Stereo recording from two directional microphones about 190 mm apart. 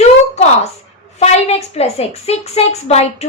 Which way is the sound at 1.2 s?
35° left (ahead or behind).